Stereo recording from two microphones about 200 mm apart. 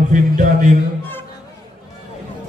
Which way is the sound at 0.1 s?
40° right (ahead or behind).